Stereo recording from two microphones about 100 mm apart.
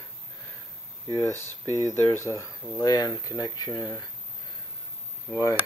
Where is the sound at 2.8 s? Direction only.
40° left (ahead or behind).